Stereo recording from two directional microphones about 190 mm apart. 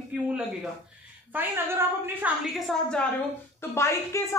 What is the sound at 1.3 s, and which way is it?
A woman's voice, 10° right (ahead or behind).